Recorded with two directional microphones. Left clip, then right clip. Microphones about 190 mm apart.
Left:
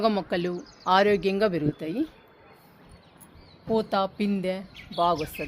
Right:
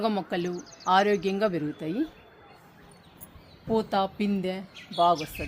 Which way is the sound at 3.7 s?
40° left (ahead or behind).